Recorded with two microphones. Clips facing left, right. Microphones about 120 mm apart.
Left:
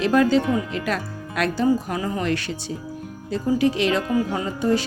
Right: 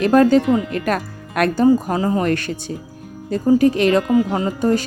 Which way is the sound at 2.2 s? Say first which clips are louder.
Right 4 dB; 50° right (ahead or behind).